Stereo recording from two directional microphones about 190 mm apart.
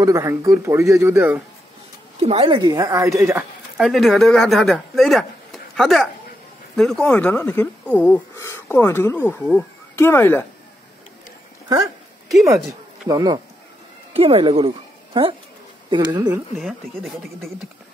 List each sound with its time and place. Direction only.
0.0 s speech: 15° right (ahead or behind)
2.1 s speech: 35° right (ahead or behind); by 3.8 s 15° right (ahead or behind)
3.8 s speech: centre (ahead or behind)
13.1 s speech: 20° right (ahead or behind)
14.1 s speech: 30° right (ahead or behind)
16.5 s speech: centre (ahead or behind)